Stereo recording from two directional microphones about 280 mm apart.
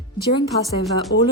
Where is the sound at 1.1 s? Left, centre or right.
Left.